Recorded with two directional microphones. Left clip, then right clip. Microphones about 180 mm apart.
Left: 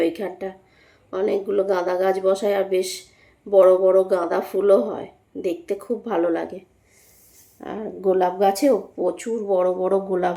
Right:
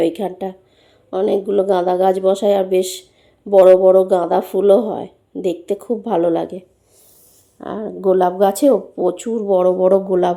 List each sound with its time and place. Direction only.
0.0 s speech: 25° right (ahead or behind)
7.6 s speech: 25° right (ahead or behind)